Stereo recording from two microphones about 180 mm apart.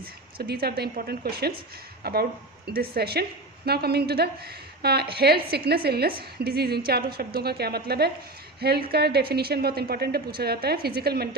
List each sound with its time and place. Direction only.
0.3 s a woman's voice: 60° right (ahead or behind)